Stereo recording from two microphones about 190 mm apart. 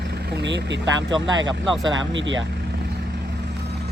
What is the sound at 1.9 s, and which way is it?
Speech, 80° right.